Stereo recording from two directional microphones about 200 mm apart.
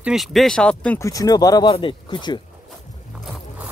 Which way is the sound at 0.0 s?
Centre (ahead or behind).